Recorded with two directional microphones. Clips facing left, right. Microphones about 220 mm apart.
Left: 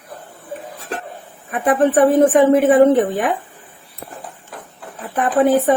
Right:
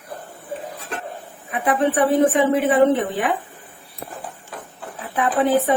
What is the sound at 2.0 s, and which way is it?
A woman's voice, 45° left (ahead or behind).